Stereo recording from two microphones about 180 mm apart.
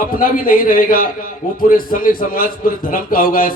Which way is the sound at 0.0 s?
50° left (ahead or behind).